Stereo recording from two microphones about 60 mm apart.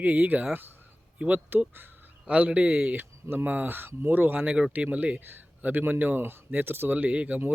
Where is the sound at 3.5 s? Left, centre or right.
Right.